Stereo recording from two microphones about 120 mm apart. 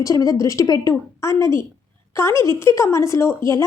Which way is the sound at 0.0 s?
30° left (ahead or behind).